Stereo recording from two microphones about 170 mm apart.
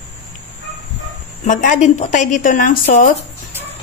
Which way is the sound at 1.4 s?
50° left (ahead or behind).